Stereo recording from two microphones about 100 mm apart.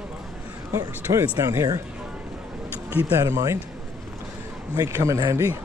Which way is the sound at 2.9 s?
25° right (ahead or behind).